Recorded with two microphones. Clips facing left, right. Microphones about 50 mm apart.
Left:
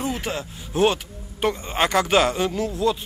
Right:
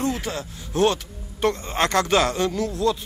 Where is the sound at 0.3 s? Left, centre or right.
Left.